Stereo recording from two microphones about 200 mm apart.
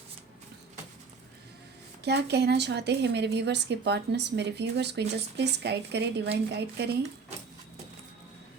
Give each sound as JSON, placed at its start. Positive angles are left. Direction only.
{"t": 2.0, "sound": "speech", "side_deg": -55}